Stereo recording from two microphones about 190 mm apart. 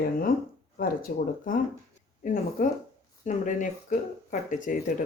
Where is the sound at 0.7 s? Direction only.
50° left (ahead or behind).